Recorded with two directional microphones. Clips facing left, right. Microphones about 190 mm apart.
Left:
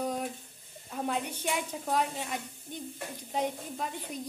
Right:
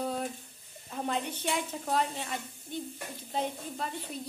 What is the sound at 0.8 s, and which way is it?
Speech, 5° left (ahead or behind).